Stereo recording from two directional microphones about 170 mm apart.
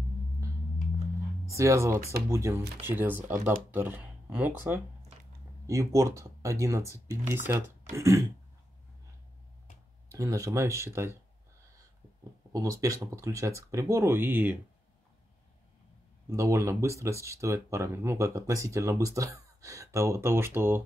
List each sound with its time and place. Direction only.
1.5 s speech: 15° right (ahead or behind)
10.1 s speech: 20° right (ahead or behind)
12.5 s speech: 20° right (ahead or behind)
16.3 s speech: 20° right (ahead or behind)